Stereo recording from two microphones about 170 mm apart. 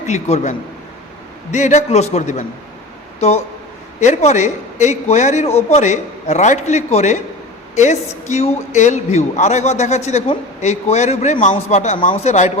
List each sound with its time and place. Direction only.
0.0 s a man's voice: 45° left (ahead or behind)
1.5 s a man's voice: 45° left (ahead or behind)
8.3 s a man's voice: 45° left (ahead or behind)